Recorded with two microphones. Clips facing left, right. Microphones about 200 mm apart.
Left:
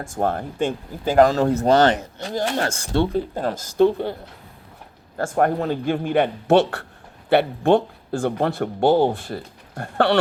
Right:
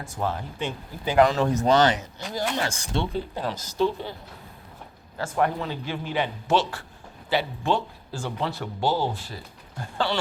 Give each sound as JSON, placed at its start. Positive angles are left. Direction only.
{"t": 0.0, "sound": "speech", "side_deg": 50}
{"t": 1.8, "sound": "speech", "side_deg": 55}
{"t": 5.1, "sound": "speech", "side_deg": 50}